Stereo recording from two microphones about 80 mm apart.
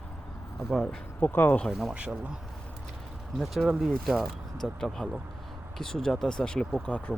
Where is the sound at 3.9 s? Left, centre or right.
Centre.